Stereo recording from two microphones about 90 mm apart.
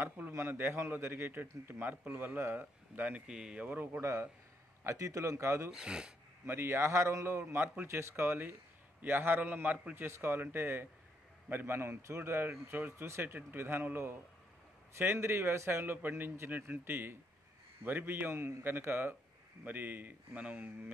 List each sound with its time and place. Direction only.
0.0 s speech: 25° right (ahead or behind)
4.0 s speech: 35° right (ahead or behind)
5.7 s speech: 10° right (ahead or behind)
6.4 s speech: 25° right (ahead or behind)